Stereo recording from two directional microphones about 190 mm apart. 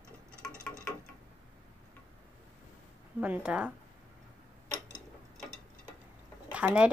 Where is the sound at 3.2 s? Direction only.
5° right (ahead or behind).